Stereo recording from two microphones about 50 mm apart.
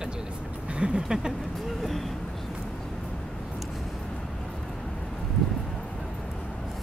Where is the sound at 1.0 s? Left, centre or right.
Centre.